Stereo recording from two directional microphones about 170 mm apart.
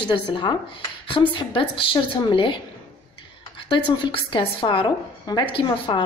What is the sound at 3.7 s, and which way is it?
A woman's voice, 30° left (ahead or behind).